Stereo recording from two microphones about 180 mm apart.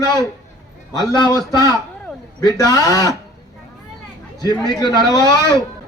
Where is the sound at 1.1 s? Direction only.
25° left (ahead or behind).